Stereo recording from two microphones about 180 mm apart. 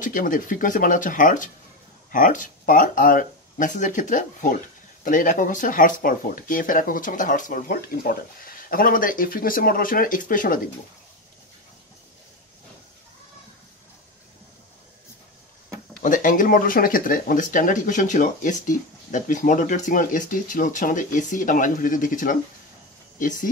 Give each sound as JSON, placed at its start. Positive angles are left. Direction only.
{"t": 0.0, "sound": "speech", "side_deg": 45}
{"t": 16.0, "sound": "speech", "side_deg": 45}